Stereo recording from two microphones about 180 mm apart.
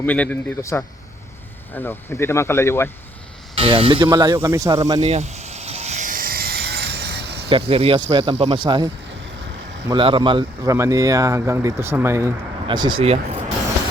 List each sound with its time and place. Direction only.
0.0 s speech: 10° left (ahead or behind)
3.5 s speech: 30° right (ahead or behind)
5.0 s a sound: 35° right (ahead or behind); by 7.3 s 60° right (ahead or behind)
7.5 s speech: 35° right (ahead or behind)
9.9 s speech: 30° right (ahead or behind)